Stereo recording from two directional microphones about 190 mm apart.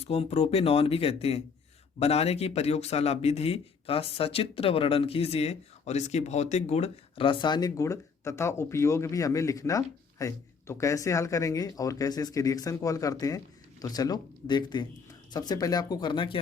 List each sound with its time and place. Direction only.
0.1 s speech: 35° left (ahead or behind)